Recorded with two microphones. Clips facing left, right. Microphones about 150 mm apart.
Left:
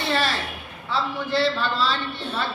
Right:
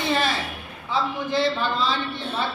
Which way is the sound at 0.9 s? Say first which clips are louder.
Right 1 dB; 15° right (ahead or behind).